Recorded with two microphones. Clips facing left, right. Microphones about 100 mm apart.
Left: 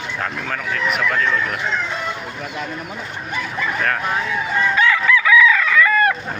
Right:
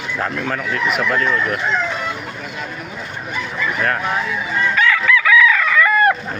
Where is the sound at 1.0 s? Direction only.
10° right (ahead or behind).